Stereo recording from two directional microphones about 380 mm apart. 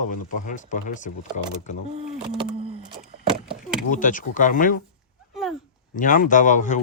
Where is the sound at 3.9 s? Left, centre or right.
Left.